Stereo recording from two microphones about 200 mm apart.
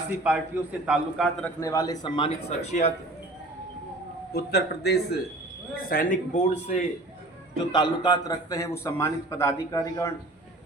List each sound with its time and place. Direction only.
0.3 s a man's voice: 5° right (ahead or behind)
1.6 s a man's voice: 15° left (ahead or behind); by 2.9 s 35° left (ahead or behind)
4.3 s speech: 50° left (ahead or behind); by 6.8 s 35° left (ahead or behind)
7.7 s a man's voice: 20° left (ahead or behind)